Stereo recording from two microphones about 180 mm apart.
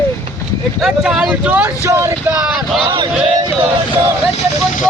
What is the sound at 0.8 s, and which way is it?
Speech, centre (ahead or behind).